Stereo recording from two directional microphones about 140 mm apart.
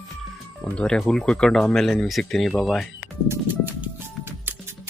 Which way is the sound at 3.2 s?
15° right (ahead or behind).